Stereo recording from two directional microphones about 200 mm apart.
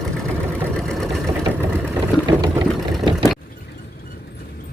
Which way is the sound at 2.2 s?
20° right (ahead or behind).